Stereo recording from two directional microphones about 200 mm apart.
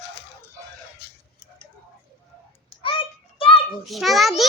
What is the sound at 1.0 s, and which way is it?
Tick-tock, 50° left (ahead or behind).